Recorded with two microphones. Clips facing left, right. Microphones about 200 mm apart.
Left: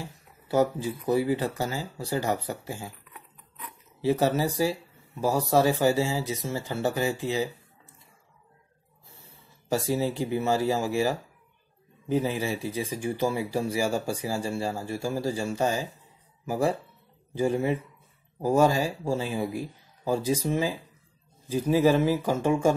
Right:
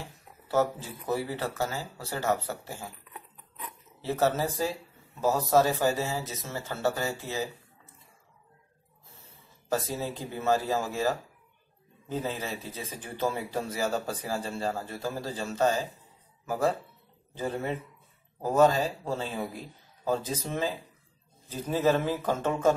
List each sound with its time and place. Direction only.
0.5 s speech: 15° left (ahead or behind)
4.0 s speech: 15° left (ahead or behind)
9.2 s a sound: 15° left (ahead or behind)
10.3 s speech: 10° left (ahead or behind)